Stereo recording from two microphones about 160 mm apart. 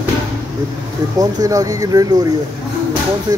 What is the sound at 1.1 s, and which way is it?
Speech, 20° right (ahead or behind).